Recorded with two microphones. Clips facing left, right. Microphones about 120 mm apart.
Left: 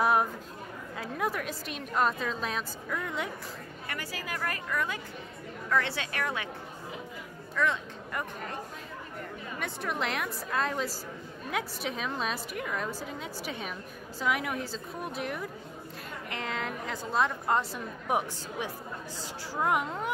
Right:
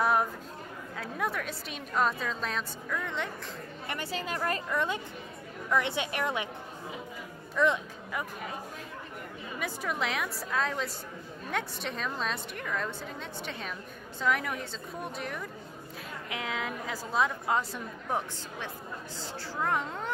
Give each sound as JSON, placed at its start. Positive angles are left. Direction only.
{"t": 0.0, "sound": "chatter", "side_deg": 5}
{"t": 0.9, "sound": "a woman's voice", "side_deg": 0}
{"t": 3.8, "sound": "a woman's voice", "side_deg": -25}
{"t": 7.5, "sound": "speech", "side_deg": -20}
{"t": 8.1, "sound": "a woman's voice", "side_deg": -5}
{"t": 9.6, "sound": "a woman's voice", "side_deg": 0}
{"t": 18.0, "sound": "a woman's voice", "side_deg": 15}